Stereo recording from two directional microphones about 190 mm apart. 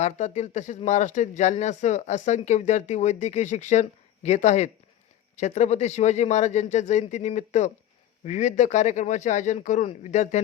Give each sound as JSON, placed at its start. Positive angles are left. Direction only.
{"t": 0.0, "sound": "speech", "side_deg": 35}